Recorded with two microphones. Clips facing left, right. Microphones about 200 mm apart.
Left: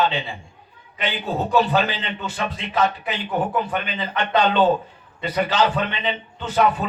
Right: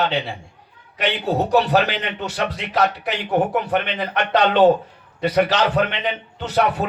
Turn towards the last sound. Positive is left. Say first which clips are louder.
# even
turn(degrees=-70)  # may be behind; listen again after turning